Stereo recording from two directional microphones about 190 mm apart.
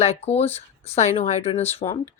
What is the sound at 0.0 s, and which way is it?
Speech, 35° left (ahead or behind).